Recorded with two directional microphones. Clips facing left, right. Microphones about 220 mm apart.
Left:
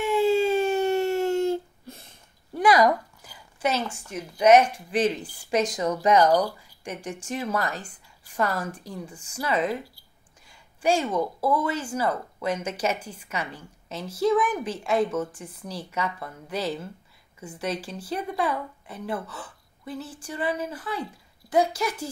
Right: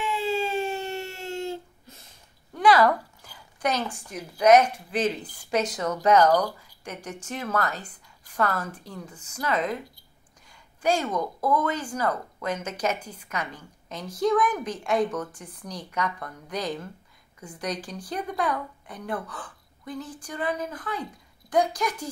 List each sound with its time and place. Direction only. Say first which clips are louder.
0.0 s a sound: left 6 dB; 50° left (ahead or behind)
2.5 s a woman's voice: even; 15° left (ahead or behind)
10.8 s a woman's voice: left 2 dB; 10° left (ahead or behind)